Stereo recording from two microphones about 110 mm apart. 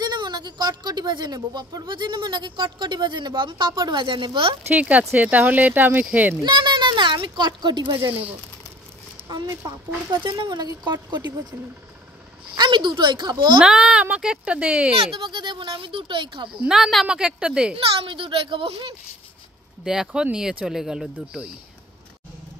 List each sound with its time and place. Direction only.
0.0 s speech: 40° right (ahead or behind)
4.6 s speech: 15° right (ahead or behind)
6.4 s speech: 45° right (ahead or behind)
9.5 s speech: 25° right (ahead or behind)
10.0 s speech: 45° right (ahead or behind)
12.5 s speech: 45° right (ahead or behind)
13.6 s speech: 5° right (ahead or behind)
15.0 s speech: 50° right (ahead or behind)
16.4 s speech: 5° right (ahead or behind)
17.7 s a child's voice: 55° right (ahead or behind)
19.8 s speech: 5° right (ahead or behind)